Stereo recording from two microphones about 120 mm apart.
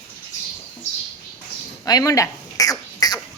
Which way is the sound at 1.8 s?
30° left (ahead or behind).